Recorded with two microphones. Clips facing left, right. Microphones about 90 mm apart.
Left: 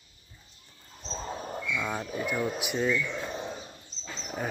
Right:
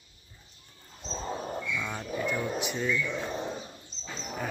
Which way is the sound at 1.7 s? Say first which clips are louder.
Left 2 dB; 15° left (ahead or behind).